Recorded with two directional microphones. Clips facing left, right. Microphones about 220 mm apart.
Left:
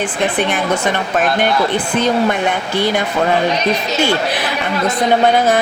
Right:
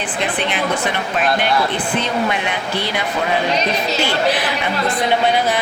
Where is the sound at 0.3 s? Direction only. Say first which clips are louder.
Left 5 dB; 45° left (ahead or behind).